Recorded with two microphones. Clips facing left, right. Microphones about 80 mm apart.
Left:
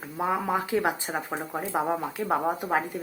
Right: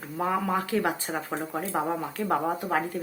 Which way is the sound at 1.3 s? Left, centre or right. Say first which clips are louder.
Right 1 dB; centre.